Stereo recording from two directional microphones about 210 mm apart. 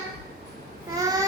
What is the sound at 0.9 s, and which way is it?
Child singing, 15° right (ahead or behind).